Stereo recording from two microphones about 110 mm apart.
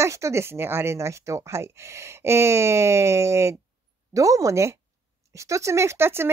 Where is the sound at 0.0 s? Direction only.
25° right (ahead or behind).